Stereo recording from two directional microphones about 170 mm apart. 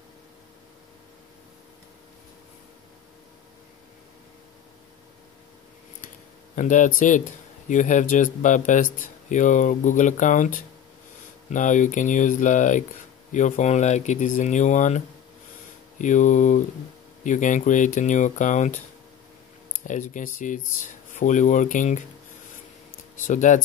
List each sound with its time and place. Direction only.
6.5 s speech: 45° left (ahead or behind)
23.2 s speech: 45° left (ahead or behind)